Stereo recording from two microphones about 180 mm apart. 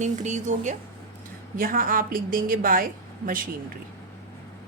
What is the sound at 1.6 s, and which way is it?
A woman's voice, 50° right (ahead or behind).